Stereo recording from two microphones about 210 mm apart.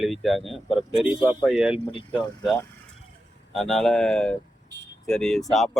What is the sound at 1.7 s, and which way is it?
Speech, 25° left (ahead or behind).